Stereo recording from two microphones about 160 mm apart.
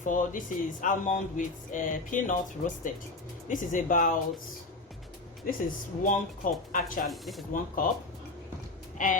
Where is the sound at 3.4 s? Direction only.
55° left (ahead or behind).